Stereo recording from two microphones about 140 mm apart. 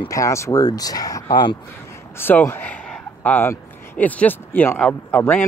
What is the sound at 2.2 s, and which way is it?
Speech, 15° left (ahead or behind).